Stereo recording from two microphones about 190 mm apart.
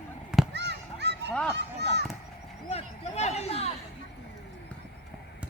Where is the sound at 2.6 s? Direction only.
35° left (ahead or behind).